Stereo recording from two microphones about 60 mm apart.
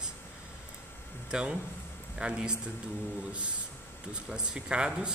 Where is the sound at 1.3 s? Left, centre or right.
Centre.